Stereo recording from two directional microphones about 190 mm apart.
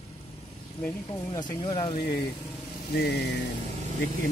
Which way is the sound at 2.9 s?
60° left (ahead or behind).